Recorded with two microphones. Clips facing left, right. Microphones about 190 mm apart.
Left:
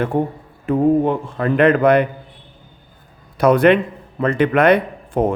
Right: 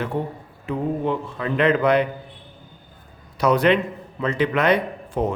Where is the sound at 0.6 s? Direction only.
50° left (ahead or behind).